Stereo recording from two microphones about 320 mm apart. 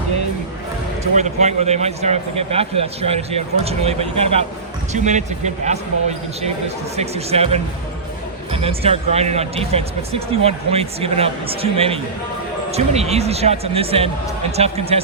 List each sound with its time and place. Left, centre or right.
1.1 s speech: right
6.9 s speech: centre